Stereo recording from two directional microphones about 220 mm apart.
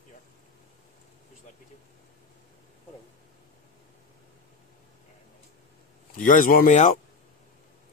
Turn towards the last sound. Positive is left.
turn(degrees=35)  # may be behind; listen again after turning